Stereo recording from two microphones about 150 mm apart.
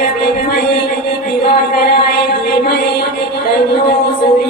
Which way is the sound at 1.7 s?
90° left.